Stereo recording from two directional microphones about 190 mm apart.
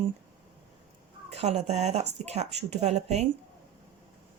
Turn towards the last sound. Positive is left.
turn(degrees=-35)  # may be behind; listen again after turning